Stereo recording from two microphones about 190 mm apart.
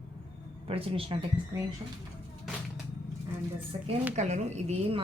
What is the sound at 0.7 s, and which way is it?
Speech, 30° right (ahead or behind).